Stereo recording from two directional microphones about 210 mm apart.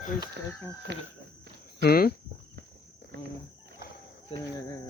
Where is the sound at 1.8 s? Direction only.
45° left (ahead or behind).